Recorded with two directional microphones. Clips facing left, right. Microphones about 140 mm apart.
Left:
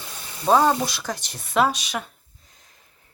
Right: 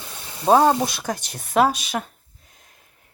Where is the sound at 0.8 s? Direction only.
50° right (ahead or behind).